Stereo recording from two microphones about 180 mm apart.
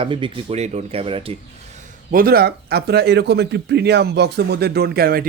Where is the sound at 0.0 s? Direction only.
30° right (ahead or behind).